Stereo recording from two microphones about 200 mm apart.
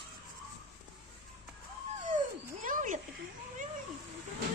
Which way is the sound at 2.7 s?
40° right (ahead or behind).